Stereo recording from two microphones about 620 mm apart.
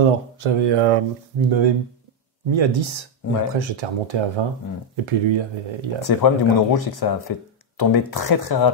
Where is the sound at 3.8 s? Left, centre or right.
Right.